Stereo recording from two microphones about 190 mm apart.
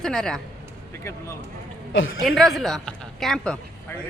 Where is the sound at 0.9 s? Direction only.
15° left (ahead or behind).